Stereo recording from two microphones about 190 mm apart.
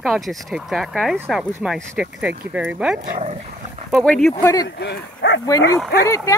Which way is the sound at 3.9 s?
5° left (ahead or behind).